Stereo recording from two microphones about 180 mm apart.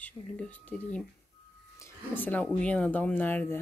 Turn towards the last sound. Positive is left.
turn(degrees=10)  # may be behind; listen again after turning